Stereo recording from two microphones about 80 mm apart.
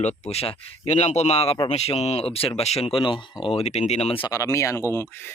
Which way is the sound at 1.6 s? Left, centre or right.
Left.